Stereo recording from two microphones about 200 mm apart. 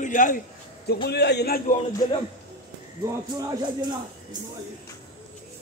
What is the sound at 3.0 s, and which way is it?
Speech, 20° right (ahead or behind).